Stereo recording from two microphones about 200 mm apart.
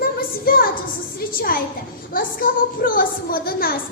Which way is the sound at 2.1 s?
45° left (ahead or behind).